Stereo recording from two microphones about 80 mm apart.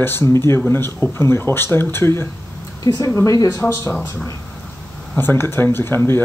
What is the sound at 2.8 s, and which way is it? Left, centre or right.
Speech, left.